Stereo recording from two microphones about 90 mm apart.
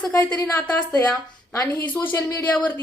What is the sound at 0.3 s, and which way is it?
A woman's voice, 30° left (ahead or behind).